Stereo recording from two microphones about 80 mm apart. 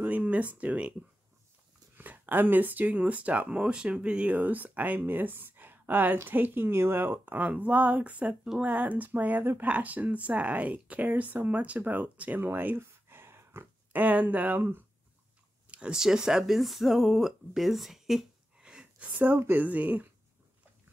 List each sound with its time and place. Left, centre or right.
0.0 s speech: centre
2.0 s speech: right
13.9 s speech: right
15.7 s speech: centre